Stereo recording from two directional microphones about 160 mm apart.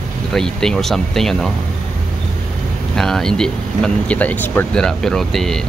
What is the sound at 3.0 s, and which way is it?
Speech, 5° left (ahead or behind).